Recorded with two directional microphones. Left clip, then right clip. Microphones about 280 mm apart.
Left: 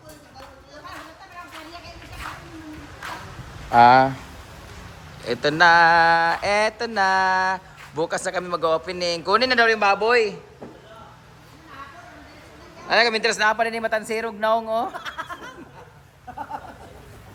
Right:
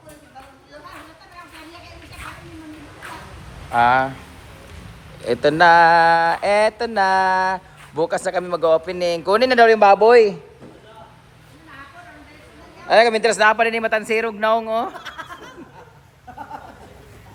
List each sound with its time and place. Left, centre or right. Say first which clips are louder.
3.7 s speech: left 3 dB; centre
5.2 s speech: right 3 dB; centre
12.9 s speech: right 5 dB; centre
16.4 s a sound: left 1 dB; centre